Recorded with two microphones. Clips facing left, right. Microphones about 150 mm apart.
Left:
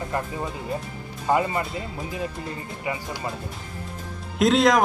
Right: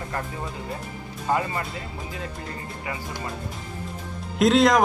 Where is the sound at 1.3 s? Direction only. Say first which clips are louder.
Left 3 dB; 20° left (ahead or behind).